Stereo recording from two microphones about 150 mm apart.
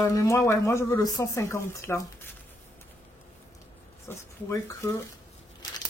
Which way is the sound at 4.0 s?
20° left (ahead or behind).